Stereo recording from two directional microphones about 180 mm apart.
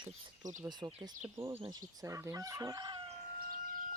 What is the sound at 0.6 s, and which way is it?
Speech, 25° right (ahead or behind).